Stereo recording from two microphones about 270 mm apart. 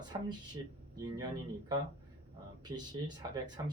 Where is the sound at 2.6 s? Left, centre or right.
Centre.